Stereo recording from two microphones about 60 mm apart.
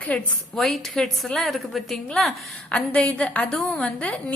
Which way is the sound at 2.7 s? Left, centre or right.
Centre.